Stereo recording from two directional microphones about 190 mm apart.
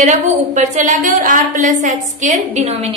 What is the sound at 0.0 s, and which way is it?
A woman's voice, 40° right (ahead or behind).